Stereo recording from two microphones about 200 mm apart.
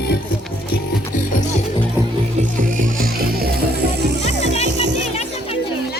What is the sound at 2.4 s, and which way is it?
Music, 40° right (ahead or behind).